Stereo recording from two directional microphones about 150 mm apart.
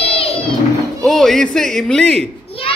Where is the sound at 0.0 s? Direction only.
40° left (ahead or behind).